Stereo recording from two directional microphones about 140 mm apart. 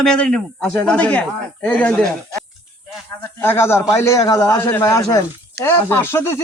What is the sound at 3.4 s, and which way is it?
A man's voice, 15° left (ahead or behind).